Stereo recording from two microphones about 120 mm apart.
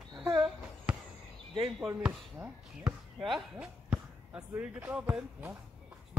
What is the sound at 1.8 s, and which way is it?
Speech, 15° right (ahead or behind).